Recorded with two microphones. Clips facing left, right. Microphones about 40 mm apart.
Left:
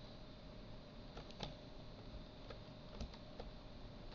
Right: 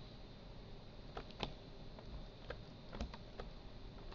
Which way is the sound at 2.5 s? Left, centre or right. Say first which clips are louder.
Right 6 dB; right.